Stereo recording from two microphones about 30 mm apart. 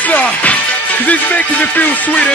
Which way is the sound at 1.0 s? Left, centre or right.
Left.